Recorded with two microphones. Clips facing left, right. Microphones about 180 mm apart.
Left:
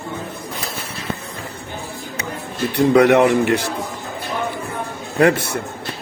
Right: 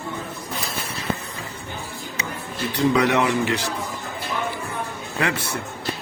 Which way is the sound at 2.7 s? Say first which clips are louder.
Left 7 dB; 55° left (ahead or behind).